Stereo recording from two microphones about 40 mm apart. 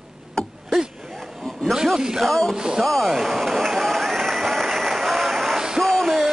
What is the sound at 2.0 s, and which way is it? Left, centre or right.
Speech, centre.